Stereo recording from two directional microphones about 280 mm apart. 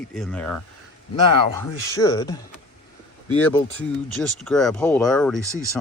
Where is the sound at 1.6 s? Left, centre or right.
Centre.